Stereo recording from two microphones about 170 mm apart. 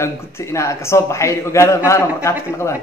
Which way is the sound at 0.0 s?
15° left (ahead or behind).